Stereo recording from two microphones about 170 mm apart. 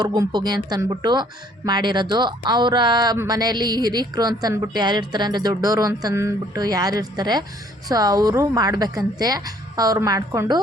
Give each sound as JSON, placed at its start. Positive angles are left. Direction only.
{"t": 0.0, "sound": "speech", "side_deg": -25}